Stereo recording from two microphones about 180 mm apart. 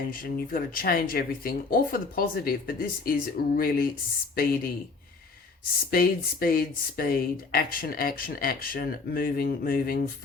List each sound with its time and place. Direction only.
0.0 s speech: 55° left (ahead or behind)
5.9 s speech: 55° left (ahead or behind)